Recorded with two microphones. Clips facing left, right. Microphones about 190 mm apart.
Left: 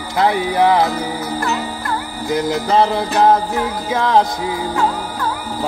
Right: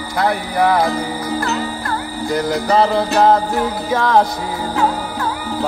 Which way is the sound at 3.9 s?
20° left (ahead or behind).